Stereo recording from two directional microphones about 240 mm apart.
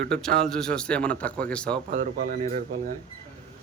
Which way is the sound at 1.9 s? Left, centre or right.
Right.